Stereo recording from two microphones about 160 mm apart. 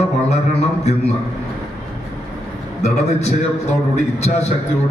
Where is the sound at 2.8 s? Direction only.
45° left (ahead or behind).